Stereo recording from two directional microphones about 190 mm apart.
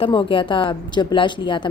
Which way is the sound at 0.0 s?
25° left (ahead or behind).